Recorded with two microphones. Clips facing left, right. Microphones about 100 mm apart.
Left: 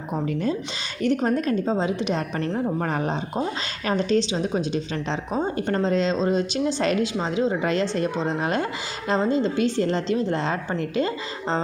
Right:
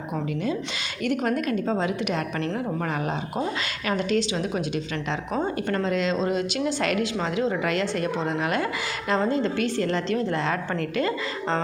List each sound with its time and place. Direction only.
1.0 s a woman's voice: 30° left (ahead or behind)